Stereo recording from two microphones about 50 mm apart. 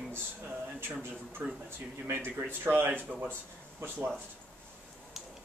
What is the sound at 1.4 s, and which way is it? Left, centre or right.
Speech, right.